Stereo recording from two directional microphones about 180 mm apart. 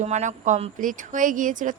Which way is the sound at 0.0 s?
40° right (ahead or behind).